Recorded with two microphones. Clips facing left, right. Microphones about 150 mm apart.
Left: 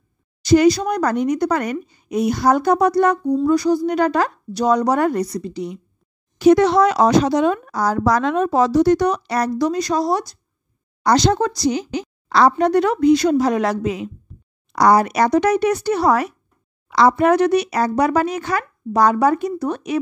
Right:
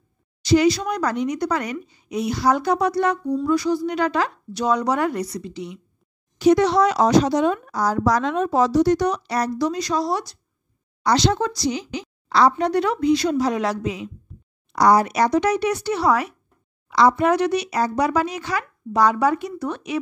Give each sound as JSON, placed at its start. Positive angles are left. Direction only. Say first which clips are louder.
{"t": 0.4, "sound": "a woman's voice", "louder": "left 4 dB", "side_deg": 45}
{"t": 6.3, "sound": "a woman's voice", "louder": "left 3 dB", "side_deg": 55}
{"t": 16.9, "sound": "a woman's voice", "louder": "left 3 dB", "side_deg": 60}